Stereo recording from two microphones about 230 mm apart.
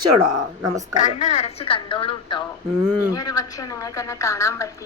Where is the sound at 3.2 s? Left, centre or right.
Centre.